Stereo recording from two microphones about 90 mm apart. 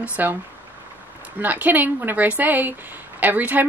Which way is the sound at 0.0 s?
20° right (ahead or behind).